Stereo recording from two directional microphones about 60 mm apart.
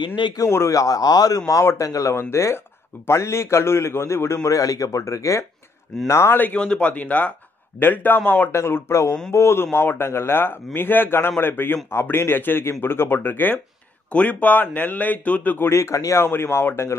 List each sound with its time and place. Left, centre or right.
0.5 s a man's voice: left
0.7 s a man's voice: left
1.8 s speech: left
2.1 s a man's voice: left
4.4 s speech: left
6.0 s a man's voice: left
6.5 s a man's voice: centre; by 8.2 s left
8.5 s a man's voice: left
15.7 s a man's voice: left
16.3 s a man's voice: left